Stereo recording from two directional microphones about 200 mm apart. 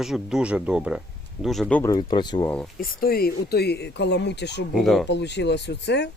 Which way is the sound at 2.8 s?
50° left (ahead or behind).